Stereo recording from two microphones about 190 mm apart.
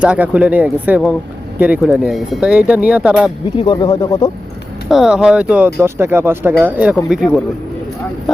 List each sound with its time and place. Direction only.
0.0 s speech: 5° right (ahead or behind)
3.6 s speech: 25° left (ahead or behind)
4.9 s speech: centre (ahead or behind)